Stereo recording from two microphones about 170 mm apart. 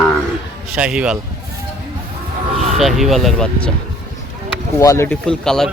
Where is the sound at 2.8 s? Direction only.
Centre (ahead or behind).